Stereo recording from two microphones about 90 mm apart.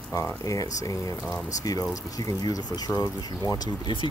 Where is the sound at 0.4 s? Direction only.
40° left (ahead or behind).